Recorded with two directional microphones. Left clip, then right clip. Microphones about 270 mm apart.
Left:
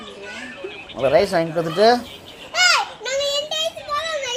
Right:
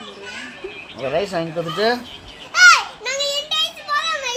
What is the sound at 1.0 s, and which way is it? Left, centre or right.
Speech, centre.